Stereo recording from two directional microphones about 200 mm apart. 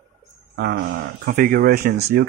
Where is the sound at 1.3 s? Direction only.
45° right (ahead or behind).